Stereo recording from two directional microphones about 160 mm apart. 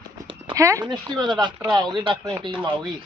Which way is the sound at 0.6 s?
20° right (ahead or behind).